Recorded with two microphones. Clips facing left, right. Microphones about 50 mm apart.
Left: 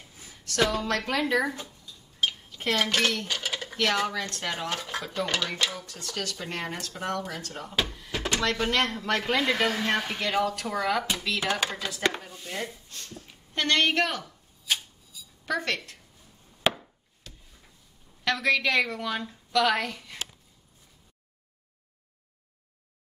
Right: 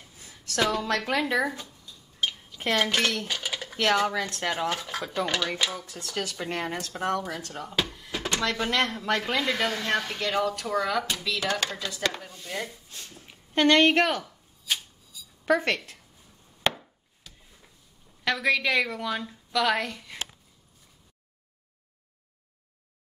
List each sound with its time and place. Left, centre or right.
0.5 s a woman's voice: centre
2.1 s cutlery: centre
2.6 s speech: centre
3.3 s cutlery: centre
3.7 s a woman's voice: centre
7.9 s a sound: centre
8.5 s a woman's voice: centre
9.3 s speech: centre
12.2 s a sound: centre
12.9 s speech: centre
14.2 s chopping: centre
15.4 s speech: right
16.6 s chop: centre
18.2 s a woman's voice: centre